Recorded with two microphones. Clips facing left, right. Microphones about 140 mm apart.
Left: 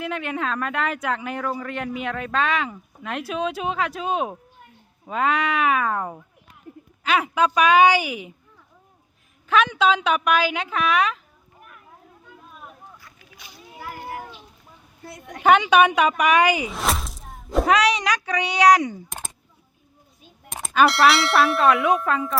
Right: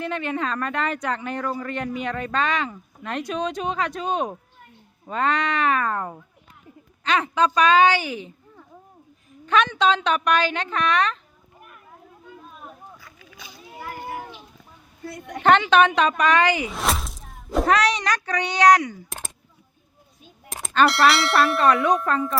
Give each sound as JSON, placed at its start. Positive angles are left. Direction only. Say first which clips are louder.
{"t": 0.0, "sound": "a woman's voice", "louder": "right 1 dB", "side_deg": 5}
{"t": 9.5, "sound": "speech", "louder": "left 1 dB", "side_deg": 5}
{"t": 13.7, "sound": "a sound", "louder": "right 1 dB", "side_deg": 0}
{"t": 15.4, "sound": "a woman's voice", "louder": "left 1 dB", "side_deg": 10}
{"t": 16.6, "sound": "speech", "louder": "even", "side_deg": 0}
{"t": 18.8, "sound": "speech", "louder": "left 3 dB", "side_deg": 20}
{"t": 20.5, "sound": "speech", "louder": "left 1 dB", "side_deg": 0}